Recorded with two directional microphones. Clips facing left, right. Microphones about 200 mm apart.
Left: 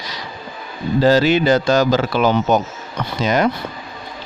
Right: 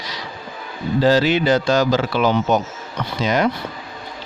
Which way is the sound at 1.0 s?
45° left (ahead or behind).